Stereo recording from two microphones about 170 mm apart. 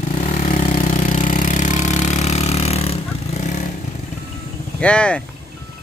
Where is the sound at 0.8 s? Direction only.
45° left (ahead or behind).